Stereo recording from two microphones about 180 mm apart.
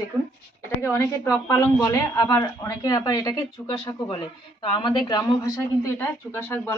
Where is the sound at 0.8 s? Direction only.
15° left (ahead or behind).